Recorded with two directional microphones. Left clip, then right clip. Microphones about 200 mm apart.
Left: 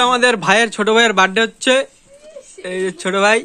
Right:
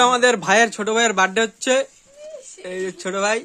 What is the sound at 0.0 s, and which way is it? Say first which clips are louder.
Speech: left 2 dB; centre (ahead or behind).